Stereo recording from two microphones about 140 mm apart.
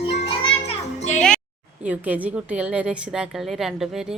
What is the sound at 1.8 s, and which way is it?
A woman's voice, 10° right (ahead or behind).